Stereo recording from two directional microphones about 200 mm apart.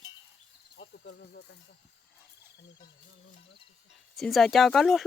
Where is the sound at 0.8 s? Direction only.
60° left (ahead or behind).